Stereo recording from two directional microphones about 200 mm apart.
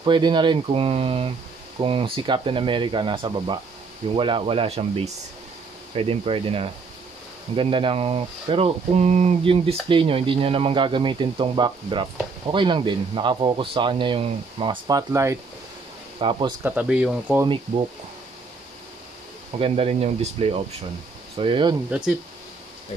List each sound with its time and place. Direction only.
0.0 s speech: 25° right (ahead or behind)
16.6 s speech: 5° right (ahead or behind)
19.6 s speech: 30° right (ahead or behind)